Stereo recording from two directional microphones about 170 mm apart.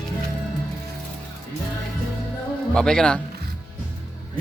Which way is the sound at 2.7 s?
5° left (ahead or behind).